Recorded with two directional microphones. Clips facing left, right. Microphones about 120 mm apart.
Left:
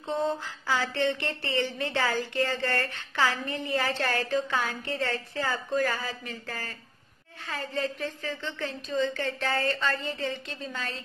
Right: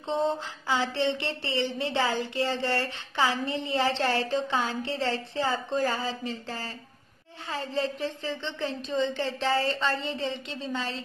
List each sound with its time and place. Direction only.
0.1 s speech: 20° right (ahead or behind)